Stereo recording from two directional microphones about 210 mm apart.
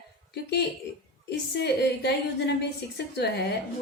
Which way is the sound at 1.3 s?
50° left (ahead or behind).